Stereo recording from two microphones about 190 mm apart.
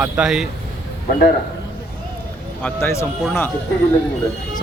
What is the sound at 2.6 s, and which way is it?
Speech, 10° left (ahead or behind).